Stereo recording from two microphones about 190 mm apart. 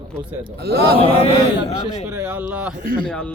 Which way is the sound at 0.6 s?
55° right (ahead or behind).